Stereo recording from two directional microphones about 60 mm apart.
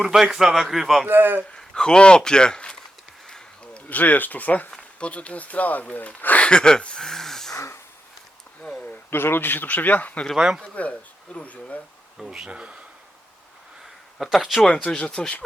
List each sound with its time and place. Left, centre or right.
0.0 s speech: centre
1.0 s speech: right
1.5 s a man's voice: centre
3.2 s a sound: centre
3.8 s speech: left; by 7.5 s centre
7.5 s a sound: left
8.6 s a sound: centre
9.0 s speech: left
10.3 s speech: centre
10.6 s speech: left
12.2 s speech: centre
12.5 s speech: centre
14.2 s speech: centre
14.7 s speech: left